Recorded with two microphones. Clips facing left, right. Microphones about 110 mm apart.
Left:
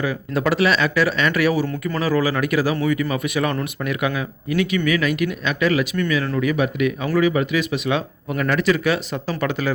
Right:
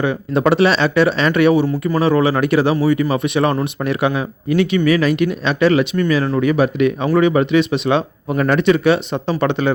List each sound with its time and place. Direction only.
0.0 s speech: 30° right (ahead or behind)